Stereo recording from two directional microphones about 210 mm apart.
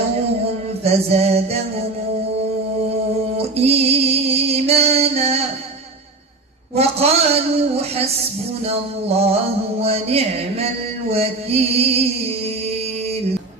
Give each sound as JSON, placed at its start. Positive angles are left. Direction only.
{"t": 0.8, "sound": "a woman's voice", "side_deg": -30}
{"t": 3.3, "sound": "music", "side_deg": -30}
{"t": 6.7, "sound": "a woman's voice", "side_deg": -30}